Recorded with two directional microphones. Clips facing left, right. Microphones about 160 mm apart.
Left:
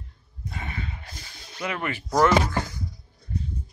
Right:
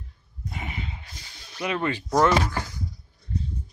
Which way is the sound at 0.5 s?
20° right (ahead or behind).